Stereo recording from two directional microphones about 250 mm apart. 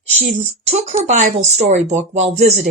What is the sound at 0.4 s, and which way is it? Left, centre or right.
Speech, right.